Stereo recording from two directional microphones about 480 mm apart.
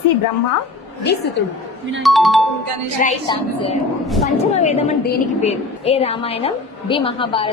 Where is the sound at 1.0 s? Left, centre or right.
Centre.